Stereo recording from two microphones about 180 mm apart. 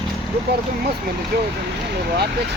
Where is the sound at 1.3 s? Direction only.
60° right (ahead or behind).